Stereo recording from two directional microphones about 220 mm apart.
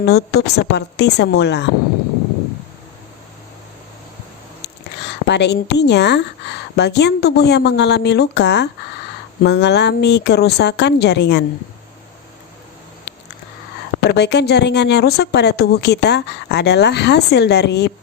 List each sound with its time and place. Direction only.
0.0 s speech: 45° left (ahead or behind)
5.3 s speech: 50° left (ahead or behind)
14.1 s speech: 50° left (ahead or behind)